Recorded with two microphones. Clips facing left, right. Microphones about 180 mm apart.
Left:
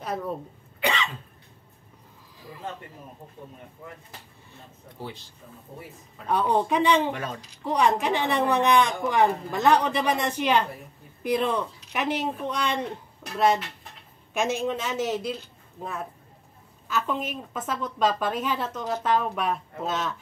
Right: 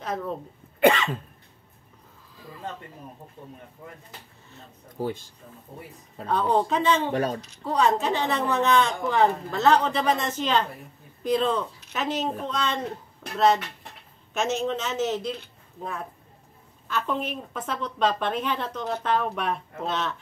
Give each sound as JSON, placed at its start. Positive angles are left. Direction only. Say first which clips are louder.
{"t": 0.0, "sound": "a woman's voice", "louder": "even", "side_deg": 5}
{"t": 0.7, "sound": "cough", "louder": "right 8 dB", "side_deg": -50}
{"t": 5.0, "sound": "speech", "louder": "right 9 dB", "side_deg": -45}
{"t": 6.2, "sound": "a woman's voice", "louder": "even", "side_deg": 15}
{"t": 7.1, "sound": "speech", "louder": "right 5 dB", "side_deg": -35}
{"t": 7.6, "sound": "a woman's voice", "louder": "even", "side_deg": 15}
{"t": 14.3, "sound": "a woman's voice", "louder": "even", "side_deg": 10}